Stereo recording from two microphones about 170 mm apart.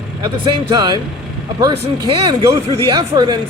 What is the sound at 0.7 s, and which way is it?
Speech, 25° right (ahead or behind).